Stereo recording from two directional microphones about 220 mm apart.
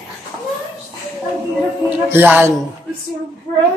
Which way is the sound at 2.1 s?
10° right (ahead or behind).